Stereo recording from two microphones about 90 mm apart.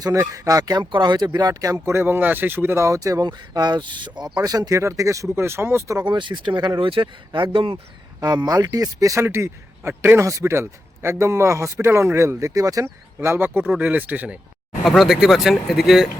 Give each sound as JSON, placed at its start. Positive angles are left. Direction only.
{"t": 0.0, "sound": "speech", "side_deg": -35}
{"t": 4.4, "sound": "a man's voice", "side_deg": -45}
{"t": 6.1, "sound": "speech", "side_deg": -65}
{"t": 8.2, "sound": "a man's voice", "side_deg": -45}
{"t": 13.1, "sound": "speech", "side_deg": -25}
{"t": 14.8, "sound": "speech", "side_deg": 0}